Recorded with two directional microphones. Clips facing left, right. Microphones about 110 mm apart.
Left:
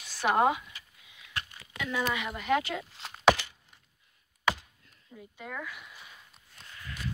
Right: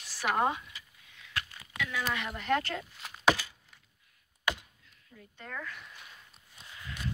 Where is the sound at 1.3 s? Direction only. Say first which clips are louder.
Right 1 dB; 25° left (ahead or behind).